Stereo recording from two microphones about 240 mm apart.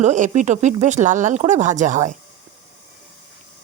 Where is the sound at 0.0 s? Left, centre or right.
Right.